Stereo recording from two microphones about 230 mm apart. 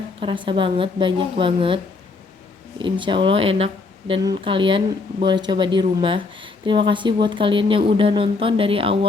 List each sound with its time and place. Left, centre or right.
0.2 s a woman's voice: right